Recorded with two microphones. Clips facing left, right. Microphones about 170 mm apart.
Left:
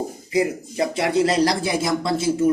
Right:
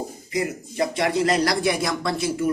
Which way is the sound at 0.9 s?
30° left (ahead or behind).